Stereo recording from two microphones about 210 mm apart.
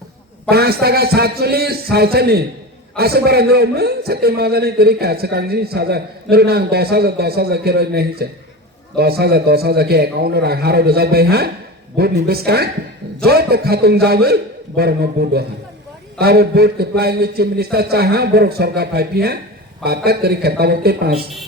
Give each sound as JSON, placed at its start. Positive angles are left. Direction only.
{"t": 0.5, "sound": "a man's voice", "side_deg": -50}